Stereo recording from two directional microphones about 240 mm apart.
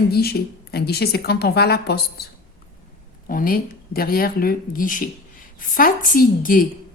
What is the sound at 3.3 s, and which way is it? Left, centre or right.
Speech, left.